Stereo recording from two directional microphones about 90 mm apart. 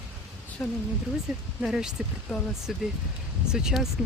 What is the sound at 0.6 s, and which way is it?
Speech, 20° left (ahead or behind).